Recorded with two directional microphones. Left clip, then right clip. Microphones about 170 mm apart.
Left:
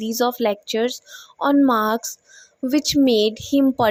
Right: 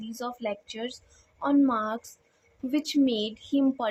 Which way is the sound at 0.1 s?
45° left (ahead or behind).